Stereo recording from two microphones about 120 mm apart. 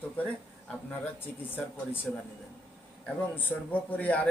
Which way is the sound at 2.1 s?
5° left (ahead or behind).